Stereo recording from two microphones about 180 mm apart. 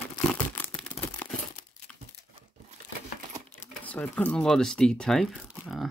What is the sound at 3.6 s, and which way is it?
Speech, 10° left (ahead or behind).